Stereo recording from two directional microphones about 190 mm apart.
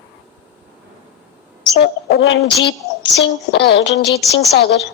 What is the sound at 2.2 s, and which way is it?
A woman's voice, 90° left.